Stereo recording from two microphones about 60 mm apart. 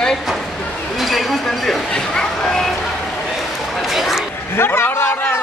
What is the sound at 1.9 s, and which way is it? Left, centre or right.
Speech, centre.